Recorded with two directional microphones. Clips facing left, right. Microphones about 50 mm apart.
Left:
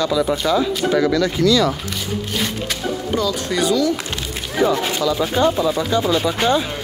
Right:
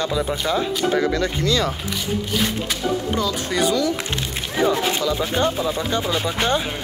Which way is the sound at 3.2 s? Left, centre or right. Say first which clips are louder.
Left 4 dB; centre.